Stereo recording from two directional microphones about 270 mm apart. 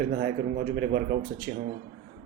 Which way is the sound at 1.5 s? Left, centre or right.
Right.